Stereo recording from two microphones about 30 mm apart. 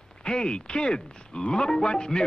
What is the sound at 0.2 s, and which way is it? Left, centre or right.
Speech, left.